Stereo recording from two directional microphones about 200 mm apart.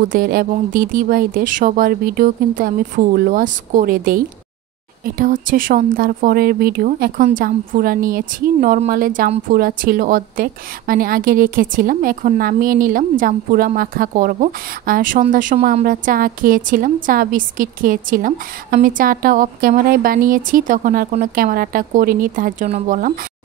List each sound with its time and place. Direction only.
0.0 s a woman's voice: 45° right (ahead or behind)